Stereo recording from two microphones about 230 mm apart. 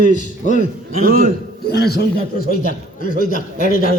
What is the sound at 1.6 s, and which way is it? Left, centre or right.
A man's voice, left.